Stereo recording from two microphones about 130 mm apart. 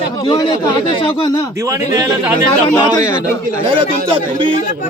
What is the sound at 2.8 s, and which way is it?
Speech, 30° left (ahead or behind).